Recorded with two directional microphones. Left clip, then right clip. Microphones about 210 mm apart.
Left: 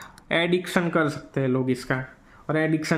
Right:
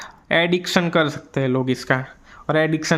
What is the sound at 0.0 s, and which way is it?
Speech, 20° right (ahead or behind).